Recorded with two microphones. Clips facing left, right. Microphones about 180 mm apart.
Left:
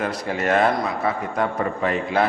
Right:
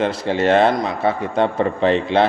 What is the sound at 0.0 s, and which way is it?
A man's voice, 30° right (ahead or behind).